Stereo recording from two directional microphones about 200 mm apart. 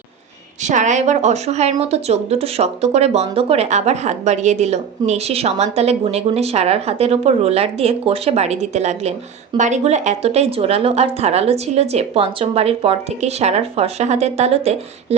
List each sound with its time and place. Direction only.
0.6 s speech: 40° right (ahead or behind)